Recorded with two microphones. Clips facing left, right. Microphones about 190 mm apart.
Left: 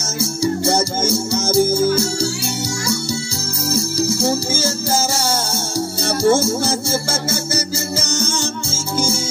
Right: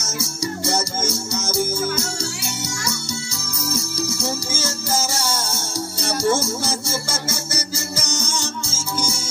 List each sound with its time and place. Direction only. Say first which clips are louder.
0.0 s music: left 7 dB; 30° left (ahead or behind)